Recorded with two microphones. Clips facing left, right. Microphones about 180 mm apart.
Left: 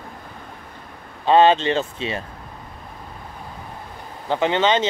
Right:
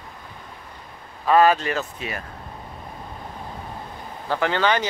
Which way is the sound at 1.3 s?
25° left (ahead or behind).